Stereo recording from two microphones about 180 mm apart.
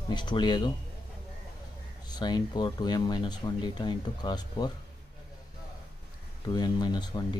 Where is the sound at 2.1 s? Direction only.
25° left (ahead or behind).